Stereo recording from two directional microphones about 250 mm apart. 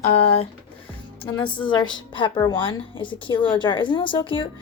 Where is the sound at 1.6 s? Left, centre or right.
Centre.